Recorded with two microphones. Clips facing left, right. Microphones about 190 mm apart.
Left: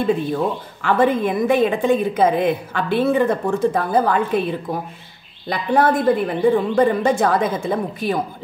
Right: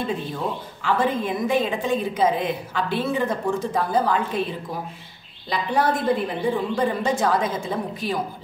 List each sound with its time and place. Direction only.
0.8 s a woman's voice: 55° left (ahead or behind)